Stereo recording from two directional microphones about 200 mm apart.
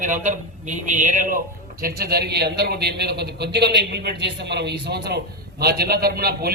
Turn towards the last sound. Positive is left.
turn(degrees=-50)  # may be behind; listen again after turning